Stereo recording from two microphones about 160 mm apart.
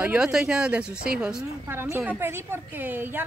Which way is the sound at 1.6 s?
15° right (ahead or behind).